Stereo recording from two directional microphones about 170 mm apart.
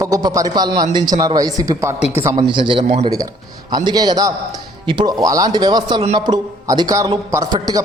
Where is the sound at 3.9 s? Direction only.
25° right (ahead or behind).